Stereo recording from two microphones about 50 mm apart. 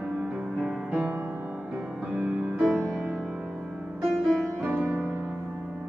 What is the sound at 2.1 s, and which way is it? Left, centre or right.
Music, right.